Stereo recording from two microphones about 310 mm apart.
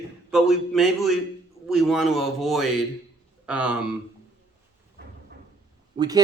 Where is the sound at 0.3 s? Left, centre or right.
Centre.